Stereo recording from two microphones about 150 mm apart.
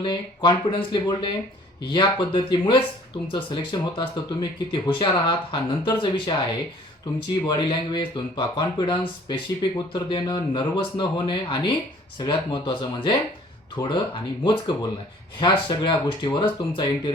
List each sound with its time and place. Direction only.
0.0 s speech: 30° left (ahead or behind)
7.4 s speech: 30° left (ahead or behind)